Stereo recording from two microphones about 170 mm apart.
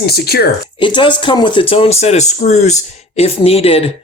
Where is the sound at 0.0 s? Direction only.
65° left (ahead or behind).